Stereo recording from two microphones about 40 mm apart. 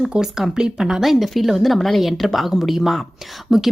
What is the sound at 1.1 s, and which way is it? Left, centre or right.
Speech, centre.